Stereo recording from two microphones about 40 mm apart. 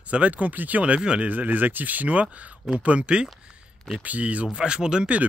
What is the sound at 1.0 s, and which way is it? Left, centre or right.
Speech, right.